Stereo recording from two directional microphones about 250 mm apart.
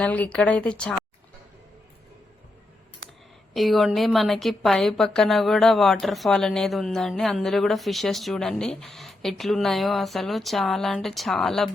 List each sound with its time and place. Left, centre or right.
0.0 s speech: centre
3.5 s speech: centre